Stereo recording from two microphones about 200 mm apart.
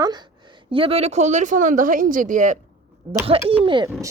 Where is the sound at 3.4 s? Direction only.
25° right (ahead or behind).